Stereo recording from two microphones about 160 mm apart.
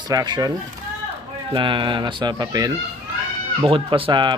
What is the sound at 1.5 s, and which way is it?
Speech, 30° right (ahead or behind).